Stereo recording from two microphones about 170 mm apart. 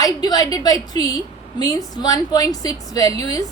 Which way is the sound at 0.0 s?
25° left (ahead or behind).